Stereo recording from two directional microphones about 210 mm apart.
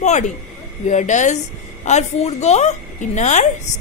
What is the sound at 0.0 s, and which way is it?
A woman's voice, 35° left (ahead or behind).